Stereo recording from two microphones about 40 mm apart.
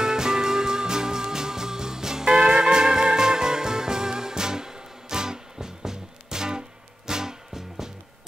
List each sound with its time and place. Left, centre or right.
0.0 s music: centre